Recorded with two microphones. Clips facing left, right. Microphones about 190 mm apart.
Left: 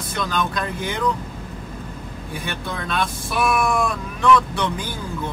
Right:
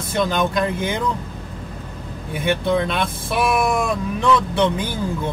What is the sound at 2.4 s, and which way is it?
Speech, 25° right (ahead or behind).